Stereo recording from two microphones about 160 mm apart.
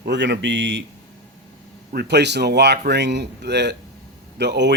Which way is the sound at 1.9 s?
90° right.